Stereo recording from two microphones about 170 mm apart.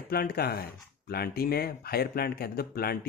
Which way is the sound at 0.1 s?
65° left (ahead or behind).